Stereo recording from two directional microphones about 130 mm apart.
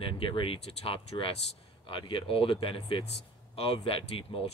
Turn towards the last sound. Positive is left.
turn(degrees=45)  # may be behind; listen again after turning